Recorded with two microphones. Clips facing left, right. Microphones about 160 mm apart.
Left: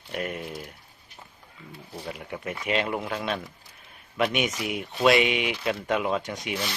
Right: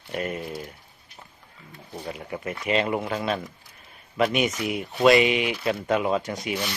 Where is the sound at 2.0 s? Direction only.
Centre (ahead or behind).